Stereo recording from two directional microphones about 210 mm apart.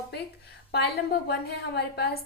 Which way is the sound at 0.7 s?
50° left (ahead or behind).